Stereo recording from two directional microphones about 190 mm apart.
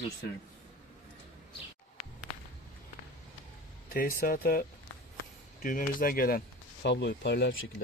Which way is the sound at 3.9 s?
50° left (ahead or behind).